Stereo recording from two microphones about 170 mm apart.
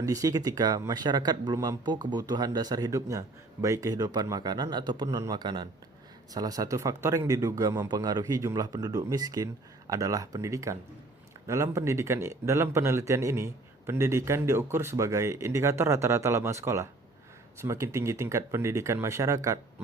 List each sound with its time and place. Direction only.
0.0 s a man's voice: 20° right (ahead or behind)